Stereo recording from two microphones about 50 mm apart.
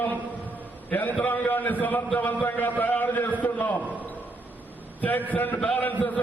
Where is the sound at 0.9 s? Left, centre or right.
Left.